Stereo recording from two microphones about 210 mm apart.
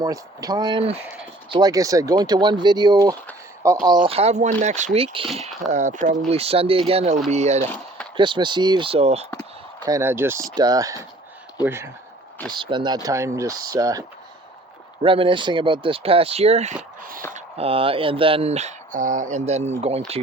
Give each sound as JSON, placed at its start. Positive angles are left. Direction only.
{"t": 0.0, "sound": "speech", "side_deg": -15}
{"t": 9.8, "sound": "speech", "side_deg": -15}
{"t": 15.0, "sound": "speech", "side_deg": -25}
{"t": 17.0, "sound": "a sound", "side_deg": -40}
{"t": 17.3, "sound": "speech", "side_deg": -25}